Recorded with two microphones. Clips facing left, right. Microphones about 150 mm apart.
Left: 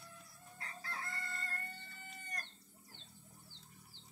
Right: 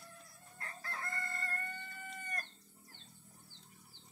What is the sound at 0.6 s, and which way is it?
Chicken, 50° right (ahead or behind).